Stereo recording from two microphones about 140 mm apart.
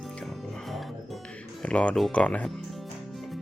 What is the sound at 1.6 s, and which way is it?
Speech, 10° left (ahead or behind).